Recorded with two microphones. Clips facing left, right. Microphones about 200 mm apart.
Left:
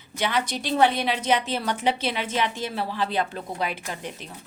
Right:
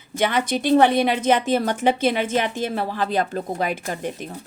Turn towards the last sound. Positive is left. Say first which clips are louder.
# right 6 dB
turn(degrees=-50)  # may be behind; listen again after turning